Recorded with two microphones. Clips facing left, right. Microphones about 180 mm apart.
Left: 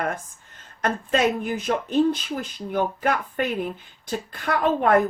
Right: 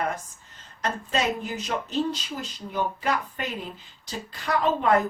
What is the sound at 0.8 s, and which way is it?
Speech, 55° left (ahead or behind).